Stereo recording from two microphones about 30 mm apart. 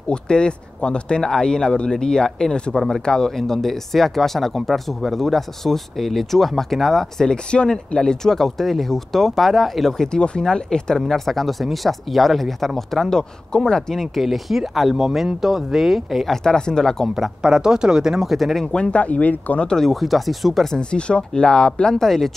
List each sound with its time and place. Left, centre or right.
0.1 s speech: left; by 7.2 s centre
7.2 s speech: left; by 9.8 s centre
10.1 s speech: left
11.1 s speech: centre
13.7 s speech: left
14.2 s speech: centre
16.4 s speech: left
17.4 s speech: right
18.3 s speech: centre
18.7 s speech: left
19.0 s speech: left
19.8 s speech: centre
20.7 s speech: left
21.9 s speech: centre